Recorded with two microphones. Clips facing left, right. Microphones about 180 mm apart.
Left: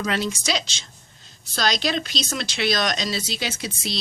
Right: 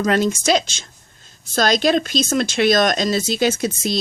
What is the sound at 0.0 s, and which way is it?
Speech, 45° right (ahead or behind).